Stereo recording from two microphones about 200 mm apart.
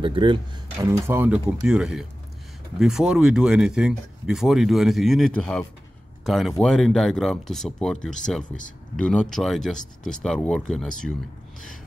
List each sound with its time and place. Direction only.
0.0 s speech: 25° right (ahead or behind)
1.0 s speech: 10° right (ahead or behind)